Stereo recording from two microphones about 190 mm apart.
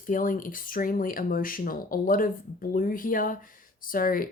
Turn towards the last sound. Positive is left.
turn(degrees=45)  # may be behind; listen again after turning